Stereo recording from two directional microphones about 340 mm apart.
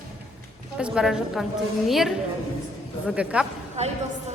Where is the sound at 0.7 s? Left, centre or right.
Centre.